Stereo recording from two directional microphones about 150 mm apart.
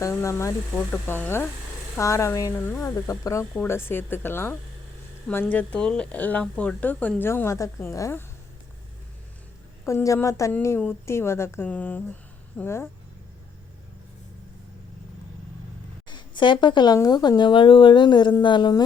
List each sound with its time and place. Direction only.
0.0 s speech: 20° left (ahead or behind)
9.8 s speech: 20° left (ahead or behind)
16.0 s speech: 30° left (ahead or behind)